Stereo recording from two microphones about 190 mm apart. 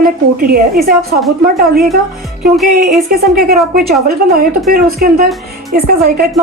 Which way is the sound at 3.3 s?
50° right (ahead or behind).